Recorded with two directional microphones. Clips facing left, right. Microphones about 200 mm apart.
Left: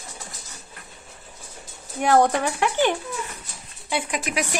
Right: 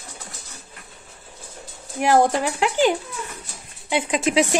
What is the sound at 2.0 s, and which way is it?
Speech, 10° right (ahead or behind).